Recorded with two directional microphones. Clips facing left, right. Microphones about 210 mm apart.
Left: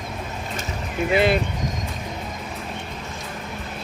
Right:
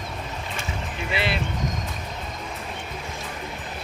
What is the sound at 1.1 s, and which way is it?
Speech, 50° left (ahead or behind).